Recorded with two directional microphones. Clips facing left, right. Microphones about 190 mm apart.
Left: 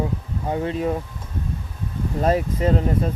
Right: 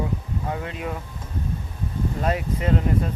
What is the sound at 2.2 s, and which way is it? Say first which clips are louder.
Speech: left 7 dB; 35° left (ahead or behind).